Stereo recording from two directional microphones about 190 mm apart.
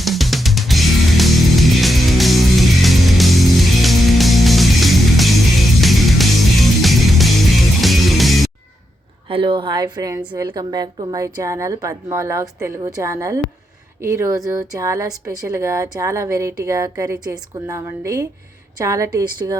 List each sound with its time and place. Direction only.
0.0 s music: centre (ahead or behind)
9.3 s a woman's voice: 25° right (ahead or behind)